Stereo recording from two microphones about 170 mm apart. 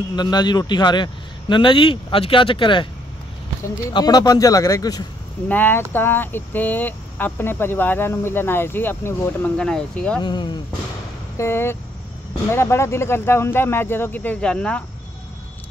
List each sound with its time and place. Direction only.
0.1 s a man's voice: 25° left (ahead or behind)
3.9 s a man's voice: 25° left (ahead or behind); by 10.2 s 5° left (ahead or behind)
10.2 s a man's voice: 25° left (ahead or behind)
11.3 s speech: 15° left (ahead or behind)